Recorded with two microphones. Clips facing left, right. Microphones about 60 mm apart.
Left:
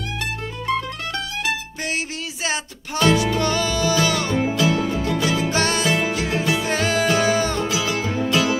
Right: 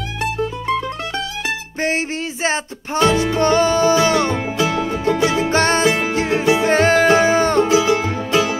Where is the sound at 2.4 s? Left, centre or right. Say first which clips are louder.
Right 5 dB; right.